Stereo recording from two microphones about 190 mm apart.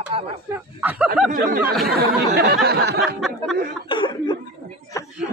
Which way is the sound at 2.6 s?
60° right (ahead or behind).